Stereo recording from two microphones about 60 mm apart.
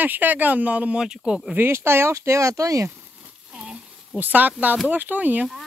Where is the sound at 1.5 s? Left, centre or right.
Right.